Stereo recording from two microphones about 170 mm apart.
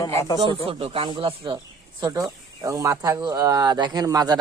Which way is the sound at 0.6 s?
35° right (ahead or behind).